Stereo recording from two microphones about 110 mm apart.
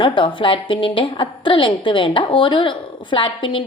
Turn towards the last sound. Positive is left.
turn(degrees=50)  # may be behind; listen again after turning